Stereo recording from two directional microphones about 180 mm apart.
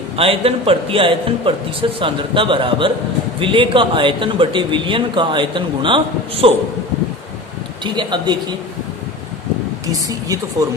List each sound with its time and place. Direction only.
0.2 s a man's voice: 30° right (ahead or behind)
7.9 s a man's voice: 25° right (ahead or behind)
9.8 s a man's voice: 20° right (ahead or behind)